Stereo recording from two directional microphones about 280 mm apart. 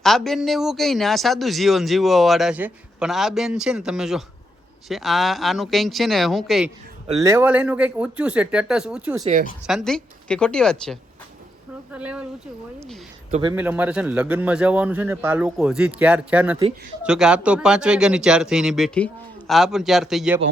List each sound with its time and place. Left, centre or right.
0.0 s speech: centre
9.2 s speech: right
9.6 s speech: centre
13.3 s speech: centre
13.6 s speech: centre